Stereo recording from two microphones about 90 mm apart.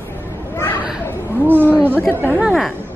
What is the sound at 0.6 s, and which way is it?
Children playing, 20° left (ahead or behind).